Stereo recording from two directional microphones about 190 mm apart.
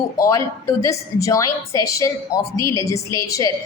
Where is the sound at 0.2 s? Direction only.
15° left (ahead or behind).